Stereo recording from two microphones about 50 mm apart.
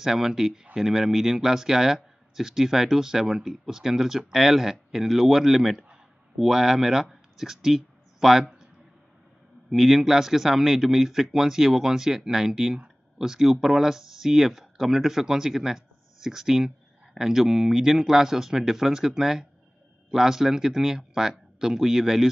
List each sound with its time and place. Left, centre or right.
0.0 s speech: centre
9.7 s speech: centre